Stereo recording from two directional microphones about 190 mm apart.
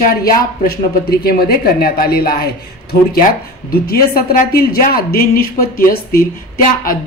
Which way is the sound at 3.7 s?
55° left (ahead or behind).